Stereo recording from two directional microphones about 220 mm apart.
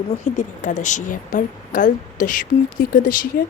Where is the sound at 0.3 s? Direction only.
35° left (ahead or behind).